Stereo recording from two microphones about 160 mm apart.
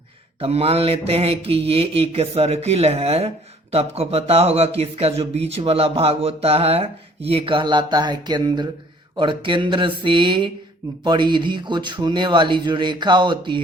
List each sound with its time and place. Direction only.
0.3 s speech: 35° right (ahead or behind)